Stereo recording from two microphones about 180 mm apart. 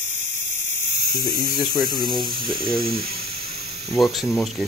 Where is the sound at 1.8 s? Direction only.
55° right (ahead or behind).